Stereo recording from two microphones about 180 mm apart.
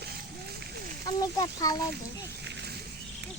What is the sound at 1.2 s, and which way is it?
Speech, 20° left (ahead or behind).